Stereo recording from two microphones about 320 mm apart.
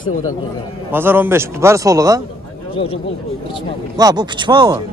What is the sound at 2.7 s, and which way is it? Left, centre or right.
Speech, centre.